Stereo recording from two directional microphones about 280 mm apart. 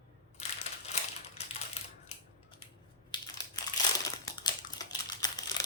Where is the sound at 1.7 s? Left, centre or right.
Left.